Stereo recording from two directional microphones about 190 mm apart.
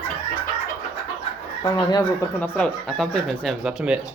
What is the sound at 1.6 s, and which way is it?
Speech, 20° left (ahead or behind).